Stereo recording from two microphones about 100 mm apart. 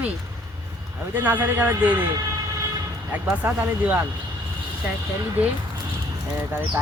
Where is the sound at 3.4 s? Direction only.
20° right (ahead or behind).